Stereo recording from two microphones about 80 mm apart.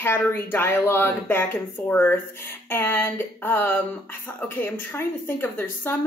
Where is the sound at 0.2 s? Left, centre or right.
Left.